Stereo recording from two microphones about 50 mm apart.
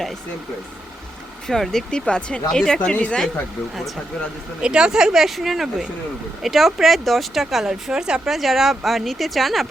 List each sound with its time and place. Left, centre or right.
1.5 s speech: centre
2.9 s speech: left
4.6 s speech: centre
8.4 s speech: centre